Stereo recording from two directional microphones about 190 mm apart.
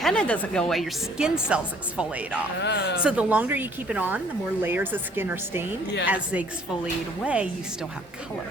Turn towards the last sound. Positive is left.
turn(degrees=-5)  # may be behind; listen again after turning